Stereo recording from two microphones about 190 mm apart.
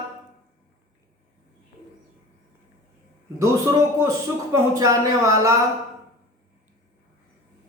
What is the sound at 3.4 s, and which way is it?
A man's voice, 15° right (ahead or behind).